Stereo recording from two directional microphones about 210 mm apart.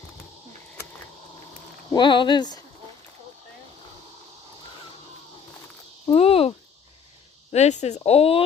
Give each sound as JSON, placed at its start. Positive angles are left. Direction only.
{"t": 1.9, "sound": "speech", "side_deg": 20}
{"t": 6.1, "sound": "cricket", "side_deg": 25}
{"t": 7.5, "sound": "speech", "side_deg": 30}